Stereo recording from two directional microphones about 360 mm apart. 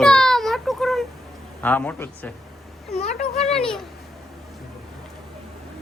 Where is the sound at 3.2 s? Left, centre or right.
Centre.